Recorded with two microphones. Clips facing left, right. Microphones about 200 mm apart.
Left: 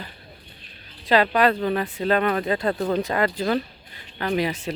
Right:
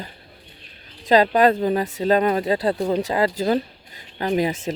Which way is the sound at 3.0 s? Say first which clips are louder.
Right 2 dB; 35° right (ahead or behind).